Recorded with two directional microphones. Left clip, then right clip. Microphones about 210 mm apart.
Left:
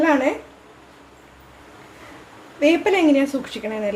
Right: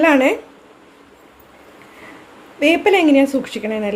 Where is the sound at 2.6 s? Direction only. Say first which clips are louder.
Right 3 dB; 25° right (ahead or behind).